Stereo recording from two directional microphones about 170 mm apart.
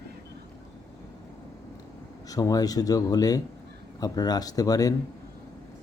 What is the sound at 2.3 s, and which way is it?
A man's voice, 20° left (ahead or behind).